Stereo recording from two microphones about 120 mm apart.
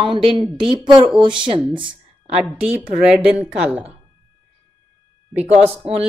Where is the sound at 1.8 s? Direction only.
50° right (ahead or behind).